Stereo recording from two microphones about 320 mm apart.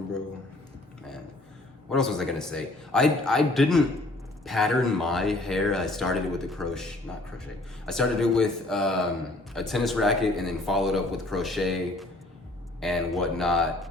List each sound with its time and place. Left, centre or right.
1.9 s a man's voice: centre